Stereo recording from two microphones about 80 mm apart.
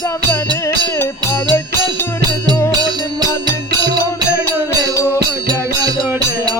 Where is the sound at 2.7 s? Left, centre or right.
Right.